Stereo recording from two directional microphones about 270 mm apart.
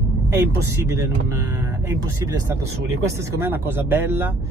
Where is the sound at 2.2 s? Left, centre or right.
Centre.